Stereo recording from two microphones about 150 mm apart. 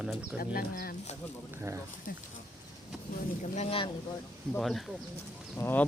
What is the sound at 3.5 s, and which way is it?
Speech, 40° left (ahead or behind).